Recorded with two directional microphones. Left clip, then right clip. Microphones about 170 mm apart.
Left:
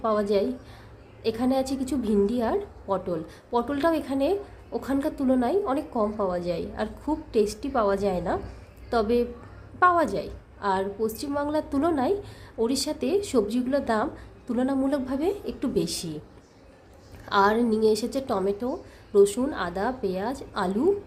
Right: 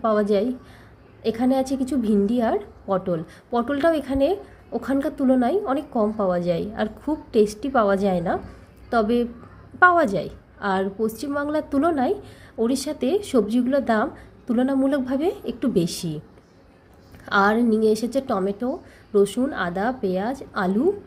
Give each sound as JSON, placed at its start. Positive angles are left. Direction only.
{"t": 0.0, "sound": "a woman's voice", "side_deg": -15}
{"t": 17.2, "sound": "a woman's voice", "side_deg": -15}